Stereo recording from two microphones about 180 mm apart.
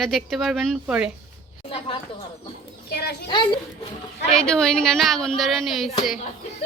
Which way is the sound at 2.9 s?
65° left (ahead or behind).